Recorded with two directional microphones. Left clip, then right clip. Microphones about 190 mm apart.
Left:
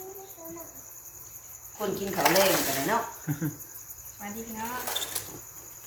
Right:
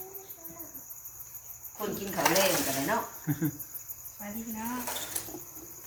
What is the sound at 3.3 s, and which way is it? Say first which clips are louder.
Speech: right 1 dB; 25° right (ahead or behind).